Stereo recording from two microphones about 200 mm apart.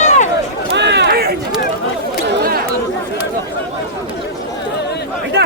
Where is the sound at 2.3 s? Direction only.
50° right (ahead or behind).